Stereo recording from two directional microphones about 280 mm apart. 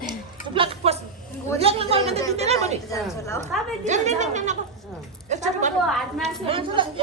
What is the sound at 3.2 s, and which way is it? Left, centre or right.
Speech, centre.